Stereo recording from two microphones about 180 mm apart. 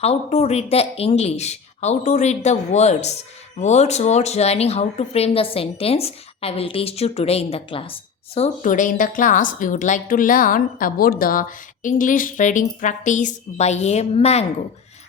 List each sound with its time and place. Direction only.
0.0 s a woman's voice: 35° left (ahead or behind)
8.4 s a woman's voice: 45° left (ahead or behind)